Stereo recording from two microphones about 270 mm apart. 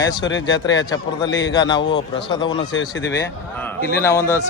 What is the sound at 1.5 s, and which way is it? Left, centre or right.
A man's voice, centre.